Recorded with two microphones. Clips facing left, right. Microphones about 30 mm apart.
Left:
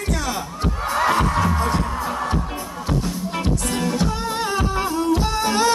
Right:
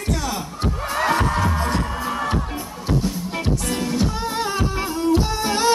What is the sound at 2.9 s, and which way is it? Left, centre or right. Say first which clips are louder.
Music: right 1 dB; centre.